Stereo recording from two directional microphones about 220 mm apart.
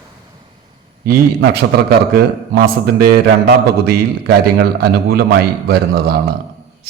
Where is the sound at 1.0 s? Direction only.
45° right (ahead or behind).